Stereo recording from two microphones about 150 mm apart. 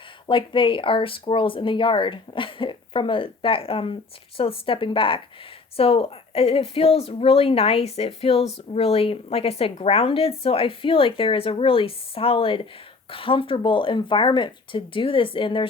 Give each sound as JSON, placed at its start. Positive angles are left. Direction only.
{"t": 0.3, "sound": "a woman's voice", "side_deg": 35}